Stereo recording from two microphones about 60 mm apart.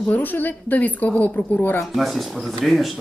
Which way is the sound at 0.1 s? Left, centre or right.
Left.